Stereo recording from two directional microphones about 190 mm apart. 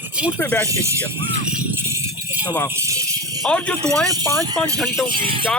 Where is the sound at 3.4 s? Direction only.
5° left (ahead or behind).